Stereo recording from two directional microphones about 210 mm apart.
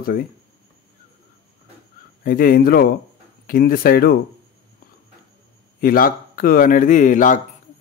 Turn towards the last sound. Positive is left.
turn(degrees=40)  # may be behind; listen again after turning